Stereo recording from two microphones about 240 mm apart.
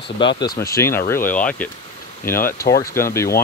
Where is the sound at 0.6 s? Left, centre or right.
Centre.